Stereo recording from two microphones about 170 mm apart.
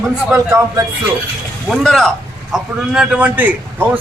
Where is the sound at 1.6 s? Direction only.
5° left (ahead or behind).